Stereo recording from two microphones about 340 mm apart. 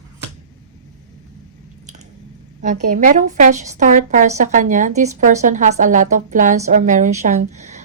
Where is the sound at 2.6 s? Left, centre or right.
Right.